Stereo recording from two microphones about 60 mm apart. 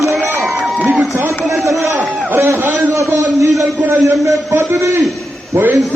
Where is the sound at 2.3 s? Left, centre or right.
Right.